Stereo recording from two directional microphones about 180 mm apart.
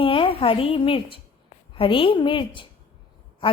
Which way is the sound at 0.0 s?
30° left (ahead or behind).